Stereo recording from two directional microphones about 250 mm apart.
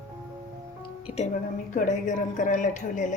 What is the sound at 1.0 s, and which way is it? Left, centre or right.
Speech, left.